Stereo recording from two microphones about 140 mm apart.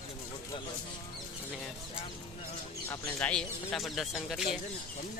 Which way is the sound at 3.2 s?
10° left (ahead or behind).